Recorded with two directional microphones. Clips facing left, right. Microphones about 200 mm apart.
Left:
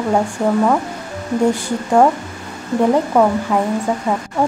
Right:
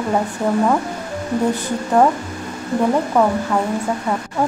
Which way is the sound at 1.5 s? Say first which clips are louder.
Left 2 dB; 10° left (ahead or behind).